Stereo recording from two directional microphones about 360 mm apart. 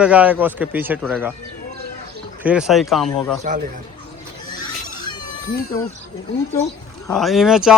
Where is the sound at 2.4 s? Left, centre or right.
Centre.